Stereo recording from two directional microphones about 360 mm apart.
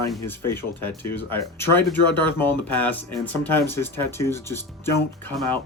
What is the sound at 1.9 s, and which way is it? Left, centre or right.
Speech, left.